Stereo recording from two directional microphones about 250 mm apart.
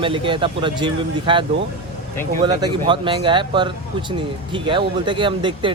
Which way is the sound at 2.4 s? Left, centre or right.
Centre.